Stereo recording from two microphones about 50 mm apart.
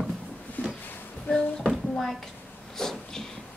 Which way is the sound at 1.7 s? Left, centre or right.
Centre.